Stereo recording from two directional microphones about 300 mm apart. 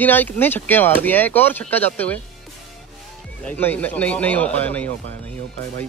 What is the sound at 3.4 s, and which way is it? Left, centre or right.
Speech, centre.